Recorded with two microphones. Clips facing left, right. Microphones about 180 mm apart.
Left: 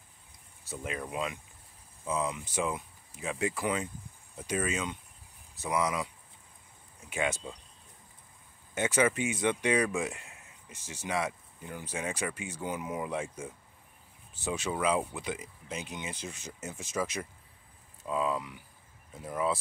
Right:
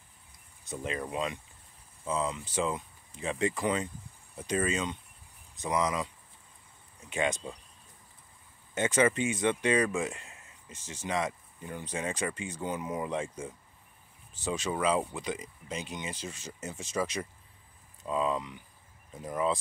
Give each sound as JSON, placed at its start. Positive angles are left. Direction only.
{"t": 0.7, "sound": "speech", "side_deg": 5}
{"t": 7.1, "sound": "speech", "side_deg": 5}
{"t": 8.7, "sound": "speech", "side_deg": 10}
{"t": 18.0, "sound": "speech", "side_deg": 5}